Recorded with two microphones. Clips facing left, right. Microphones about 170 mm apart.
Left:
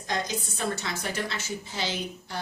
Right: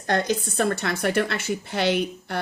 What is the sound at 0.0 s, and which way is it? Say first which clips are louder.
A woman's voice: right 8 dB; 60° right (ahead or behind).